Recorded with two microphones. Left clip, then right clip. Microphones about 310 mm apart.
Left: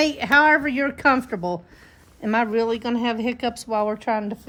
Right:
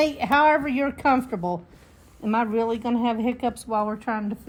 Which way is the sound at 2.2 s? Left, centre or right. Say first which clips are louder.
Left 2 dB; centre.